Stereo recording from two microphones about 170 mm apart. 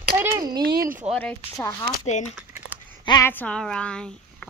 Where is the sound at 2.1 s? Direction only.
45° left (ahead or behind).